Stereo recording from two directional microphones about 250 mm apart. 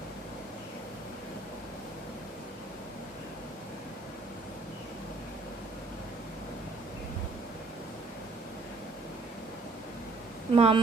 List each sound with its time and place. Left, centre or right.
10.5 s speech: right